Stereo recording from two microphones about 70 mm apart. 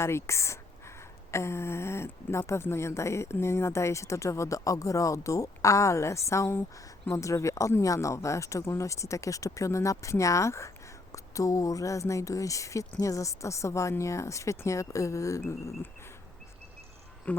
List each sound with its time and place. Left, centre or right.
0.0 s speech: left
17.3 s speech: left